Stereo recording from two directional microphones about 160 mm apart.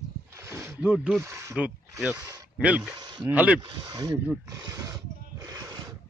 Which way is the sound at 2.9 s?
25° right (ahead or behind).